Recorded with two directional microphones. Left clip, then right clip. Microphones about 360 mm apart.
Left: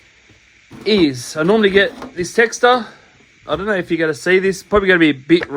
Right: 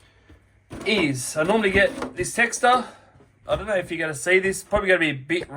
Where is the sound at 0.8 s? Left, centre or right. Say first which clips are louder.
Left 7 dB; left.